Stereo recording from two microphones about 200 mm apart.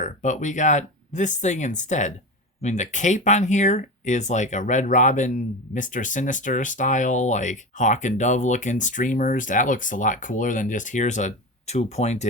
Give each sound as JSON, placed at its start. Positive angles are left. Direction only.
{"t": 0.0, "sound": "speech", "side_deg": 40}